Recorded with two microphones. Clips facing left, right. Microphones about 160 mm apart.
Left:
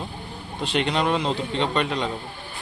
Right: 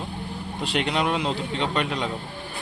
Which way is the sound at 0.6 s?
5° right (ahead or behind).